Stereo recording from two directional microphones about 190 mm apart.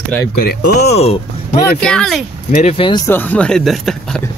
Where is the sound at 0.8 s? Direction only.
35° left (ahead or behind).